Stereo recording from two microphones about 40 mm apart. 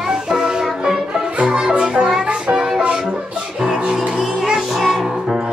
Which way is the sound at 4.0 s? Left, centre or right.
Centre.